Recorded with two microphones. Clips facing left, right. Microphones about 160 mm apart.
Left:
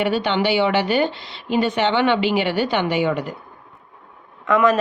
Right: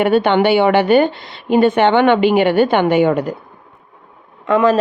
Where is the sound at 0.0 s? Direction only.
55° right (ahead or behind).